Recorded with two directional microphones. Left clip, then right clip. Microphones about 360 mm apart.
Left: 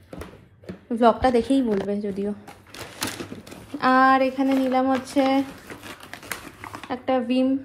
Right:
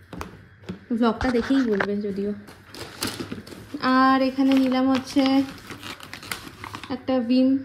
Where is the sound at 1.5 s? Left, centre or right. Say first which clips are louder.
Even; centre.